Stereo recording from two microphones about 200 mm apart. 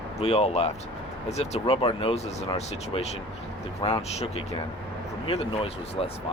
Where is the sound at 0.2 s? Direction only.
30° left (ahead or behind).